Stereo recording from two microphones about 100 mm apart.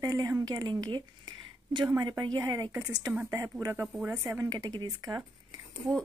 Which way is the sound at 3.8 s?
5° right (ahead or behind).